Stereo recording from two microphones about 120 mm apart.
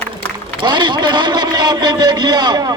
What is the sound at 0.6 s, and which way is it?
A man's voice, 40° right (ahead or behind).